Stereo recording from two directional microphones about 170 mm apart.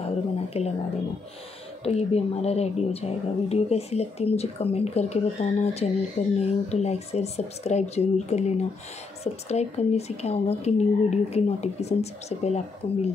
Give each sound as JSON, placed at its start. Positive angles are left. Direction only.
{"t": 0.5, "sound": "speech", "side_deg": 35}
{"t": 1.8, "sound": "a woman's voice", "side_deg": 35}